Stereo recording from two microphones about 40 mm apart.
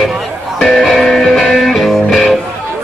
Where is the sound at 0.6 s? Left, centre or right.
Centre.